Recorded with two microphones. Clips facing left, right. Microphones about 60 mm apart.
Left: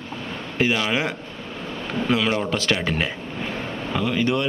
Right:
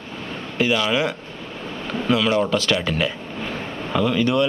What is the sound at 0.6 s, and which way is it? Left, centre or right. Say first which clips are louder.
A man's voice: right 2 dB; left.